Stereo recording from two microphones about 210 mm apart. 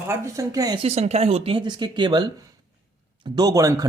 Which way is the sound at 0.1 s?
15° right (ahead or behind).